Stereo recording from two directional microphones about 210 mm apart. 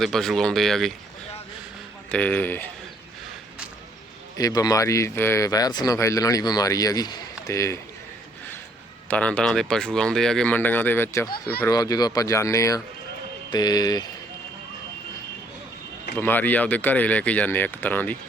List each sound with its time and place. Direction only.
0.0 s speech: centre (ahead or behind)
2.0 s speech: 5° left (ahead or behind)
4.4 s speech: 15° left (ahead or behind)
9.0 s speech: 5° left (ahead or behind)
16.1 s speech: 10° left (ahead or behind)